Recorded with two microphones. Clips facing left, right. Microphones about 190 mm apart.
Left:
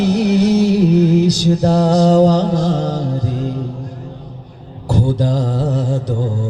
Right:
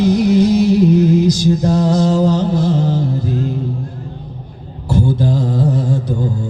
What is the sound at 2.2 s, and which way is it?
Mantra, 40° left (ahead or behind).